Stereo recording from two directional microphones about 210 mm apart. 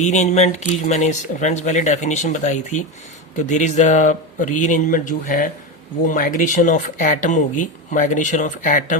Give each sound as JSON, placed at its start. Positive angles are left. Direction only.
{"t": 0.0, "sound": "speech", "side_deg": 35}